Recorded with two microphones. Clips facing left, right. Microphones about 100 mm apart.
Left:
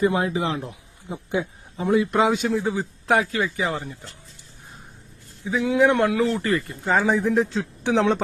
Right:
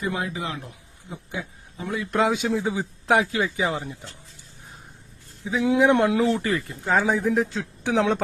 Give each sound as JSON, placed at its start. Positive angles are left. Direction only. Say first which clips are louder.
{"t": 0.0, "sound": "a man's voice", "louder": "left 7 dB", "side_deg": 30}
{"t": 2.0, "sound": "speech", "louder": "left 2 dB", "side_deg": 0}
{"t": 2.7, "sound": "speech", "louder": "even", "side_deg": -15}
{"t": 5.6, "sound": "speech", "louder": "even", "side_deg": -20}
{"t": 6.4, "sound": "speech", "louder": "left 2 dB", "side_deg": 0}